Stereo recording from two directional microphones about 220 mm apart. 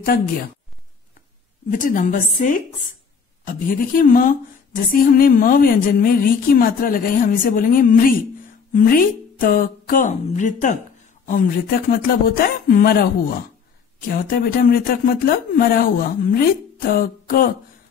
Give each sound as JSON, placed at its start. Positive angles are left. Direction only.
{"t": 1.7, "sound": "speech", "side_deg": 40}